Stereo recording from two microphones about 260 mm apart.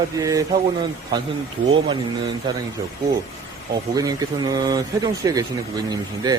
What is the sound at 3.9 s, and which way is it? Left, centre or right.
Speech, centre.